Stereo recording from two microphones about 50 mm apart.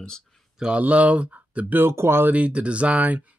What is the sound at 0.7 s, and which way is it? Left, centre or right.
Speech, right.